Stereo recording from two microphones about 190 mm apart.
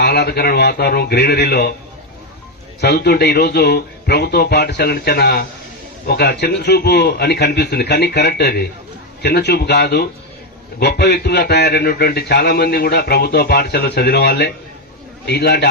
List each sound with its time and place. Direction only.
0.0 s a man's voice: 60° left (ahead or behind)
2.8 s a man's voice: 60° left (ahead or behind)